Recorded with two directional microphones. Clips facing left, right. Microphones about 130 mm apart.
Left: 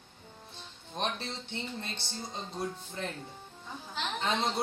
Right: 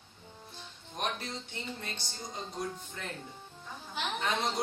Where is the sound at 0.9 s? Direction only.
25° left (ahead or behind).